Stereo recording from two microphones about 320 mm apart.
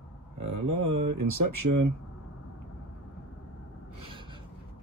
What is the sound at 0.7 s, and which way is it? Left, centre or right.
Speech, right.